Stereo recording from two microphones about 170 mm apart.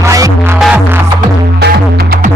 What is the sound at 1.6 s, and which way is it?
Music, 70° right (ahead or behind).